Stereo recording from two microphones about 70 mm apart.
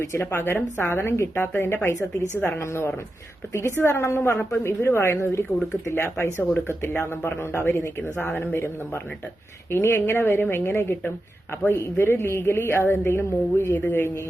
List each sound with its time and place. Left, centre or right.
0.0 s speech: left